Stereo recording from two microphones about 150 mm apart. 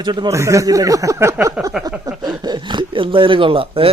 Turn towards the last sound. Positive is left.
turn(degrees=-35)  # may be behind; listen again after turning